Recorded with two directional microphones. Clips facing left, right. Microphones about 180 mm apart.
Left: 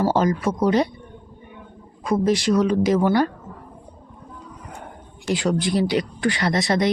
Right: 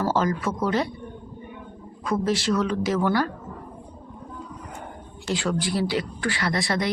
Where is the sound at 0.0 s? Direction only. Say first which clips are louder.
Left 4 dB; 15° left (ahead or behind).